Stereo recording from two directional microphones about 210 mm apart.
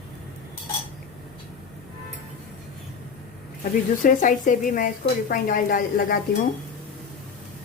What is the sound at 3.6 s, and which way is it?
Speech, 40° left (ahead or behind).